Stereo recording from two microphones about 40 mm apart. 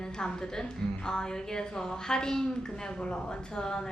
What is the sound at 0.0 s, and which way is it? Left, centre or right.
A woman's voice, centre.